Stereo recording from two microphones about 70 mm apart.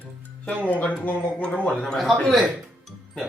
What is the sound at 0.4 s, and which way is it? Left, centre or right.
Speech, left.